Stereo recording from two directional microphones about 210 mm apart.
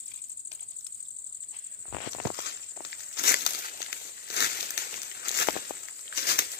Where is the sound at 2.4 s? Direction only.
50° left (ahead or behind).